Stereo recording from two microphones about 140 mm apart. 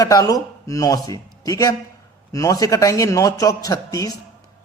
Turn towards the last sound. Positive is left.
turn(degrees=25)  # may be behind; listen again after turning